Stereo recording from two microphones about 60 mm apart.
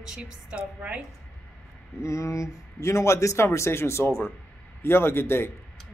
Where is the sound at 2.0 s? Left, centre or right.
Left.